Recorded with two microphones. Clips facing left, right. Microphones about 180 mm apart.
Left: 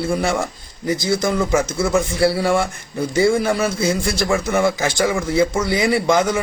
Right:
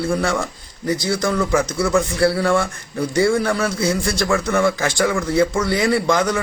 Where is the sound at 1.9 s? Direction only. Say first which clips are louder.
Even; 10° left (ahead or behind).